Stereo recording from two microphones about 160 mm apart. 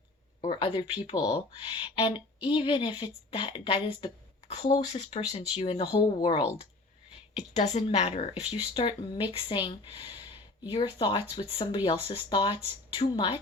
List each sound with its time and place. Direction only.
0.4 s speech: 30° left (ahead or behind)
7.3 s speech: 45° left (ahead or behind)